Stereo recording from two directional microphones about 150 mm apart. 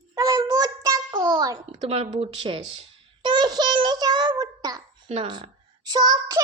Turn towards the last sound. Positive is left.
turn(degrees=-25)  # may be behind; listen again after turning